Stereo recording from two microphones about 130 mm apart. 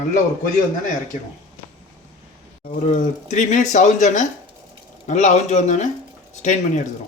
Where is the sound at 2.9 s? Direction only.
65° left (ahead or behind).